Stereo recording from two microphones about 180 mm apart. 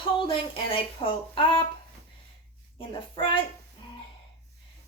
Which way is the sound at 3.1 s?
30° left (ahead or behind).